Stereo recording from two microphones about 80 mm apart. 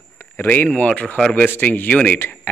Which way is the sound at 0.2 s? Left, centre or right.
Left.